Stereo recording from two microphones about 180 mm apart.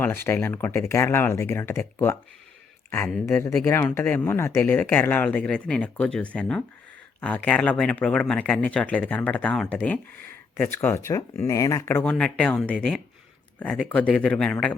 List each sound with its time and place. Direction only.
0.0 s speech: 10° left (ahead or behind)
3.2 s speech: 15° left (ahead or behind)